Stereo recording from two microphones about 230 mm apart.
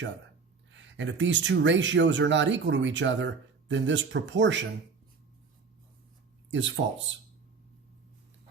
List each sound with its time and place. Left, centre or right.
0.7 s speech: right
6.5 s speech: right